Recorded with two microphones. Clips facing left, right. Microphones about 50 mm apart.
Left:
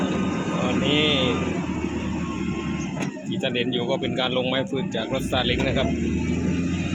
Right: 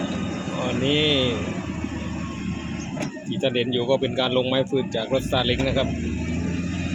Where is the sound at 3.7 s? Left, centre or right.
Left.